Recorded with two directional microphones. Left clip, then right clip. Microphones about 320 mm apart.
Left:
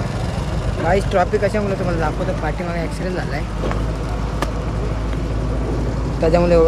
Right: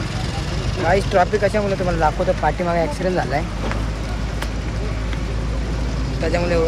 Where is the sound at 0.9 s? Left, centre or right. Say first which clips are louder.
Even; centre.